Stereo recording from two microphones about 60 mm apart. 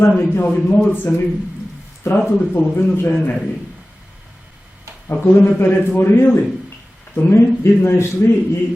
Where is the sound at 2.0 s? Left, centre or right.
Left.